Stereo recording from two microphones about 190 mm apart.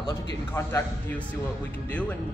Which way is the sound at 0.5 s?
15° left (ahead or behind).